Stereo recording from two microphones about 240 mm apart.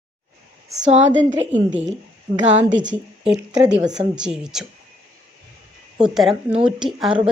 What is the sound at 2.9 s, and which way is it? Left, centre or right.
A woman's voice, centre.